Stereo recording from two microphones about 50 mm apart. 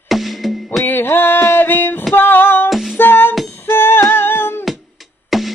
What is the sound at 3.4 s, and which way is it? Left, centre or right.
Humming, left.